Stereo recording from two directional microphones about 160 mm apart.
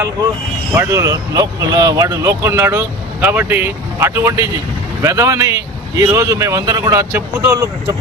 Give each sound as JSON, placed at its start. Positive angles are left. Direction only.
{"t": 0.7, "sound": "speech", "side_deg": -15}